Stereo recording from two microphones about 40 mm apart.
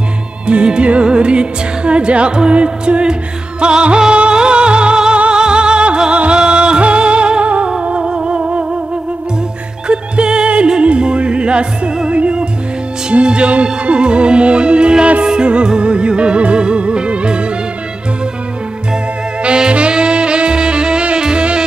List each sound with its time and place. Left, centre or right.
0.5 s music: right
9.8 s music: right
19.4 s saxophone: right